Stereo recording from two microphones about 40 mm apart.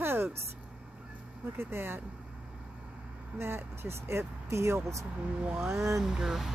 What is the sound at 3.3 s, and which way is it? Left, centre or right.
Speech, right.